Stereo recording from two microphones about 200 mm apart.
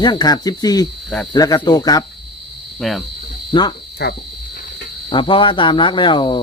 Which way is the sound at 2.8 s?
Centre (ahead or behind).